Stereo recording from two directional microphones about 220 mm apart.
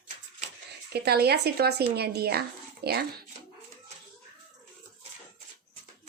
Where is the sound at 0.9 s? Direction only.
45° right (ahead or behind).